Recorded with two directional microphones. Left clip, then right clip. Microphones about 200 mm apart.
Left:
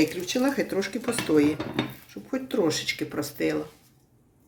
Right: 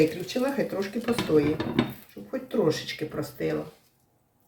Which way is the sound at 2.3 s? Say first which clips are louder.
Even; 60° left (ahead or behind).